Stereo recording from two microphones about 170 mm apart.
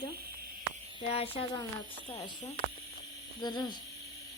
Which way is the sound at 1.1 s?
35° left (ahead or behind).